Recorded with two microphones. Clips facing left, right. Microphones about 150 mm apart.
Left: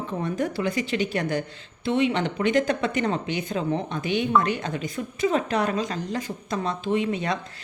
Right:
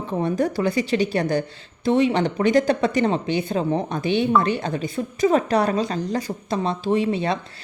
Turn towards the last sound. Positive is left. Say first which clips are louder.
# right 4 dB
turn(degrees=-30)  # may be behind; listen again after turning